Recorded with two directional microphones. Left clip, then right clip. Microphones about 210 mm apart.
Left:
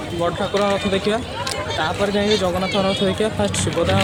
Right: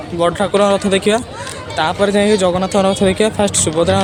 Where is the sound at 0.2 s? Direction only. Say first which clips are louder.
Right 7 dB; 40° right (ahead or behind).